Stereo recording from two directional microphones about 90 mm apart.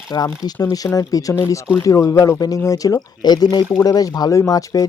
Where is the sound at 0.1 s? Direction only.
45° left (ahead or behind).